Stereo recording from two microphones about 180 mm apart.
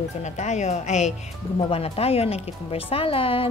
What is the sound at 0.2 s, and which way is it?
Speech, 40° left (ahead or behind).